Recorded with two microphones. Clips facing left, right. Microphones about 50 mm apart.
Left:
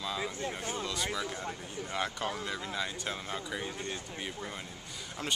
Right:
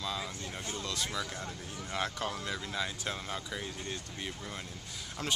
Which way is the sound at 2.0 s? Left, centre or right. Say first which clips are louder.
Left 1 dB; centre.